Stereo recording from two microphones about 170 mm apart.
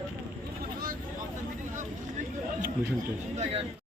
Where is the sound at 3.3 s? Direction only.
40° right (ahead or behind).